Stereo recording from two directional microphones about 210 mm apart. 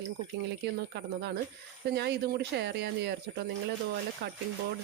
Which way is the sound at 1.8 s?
50° right (ahead or behind).